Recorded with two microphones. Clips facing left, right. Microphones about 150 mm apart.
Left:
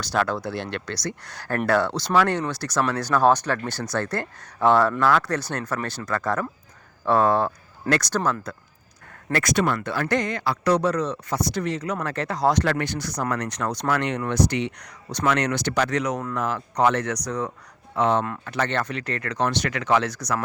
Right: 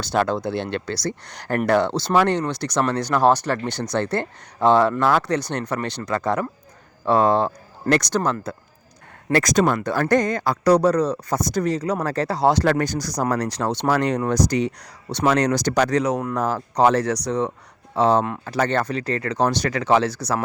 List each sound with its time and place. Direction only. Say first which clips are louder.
0.0 s speech: right 3 dB; 25° right (ahead or behind)
1.3 s speech: right 3 dB; 15° right (ahead or behind)
1.9 s speech: right 3 dB; 25° right (ahead or behind)
9.3 s speech: right 4 dB; 40° right (ahead or behind)